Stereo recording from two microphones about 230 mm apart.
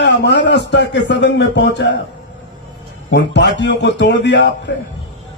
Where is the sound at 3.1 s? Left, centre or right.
Left.